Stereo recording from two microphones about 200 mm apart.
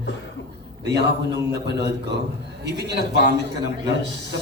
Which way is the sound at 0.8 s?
60° right (ahead or behind).